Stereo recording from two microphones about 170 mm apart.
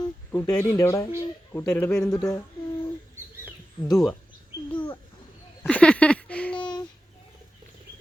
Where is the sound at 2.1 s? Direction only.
20° left (ahead or behind).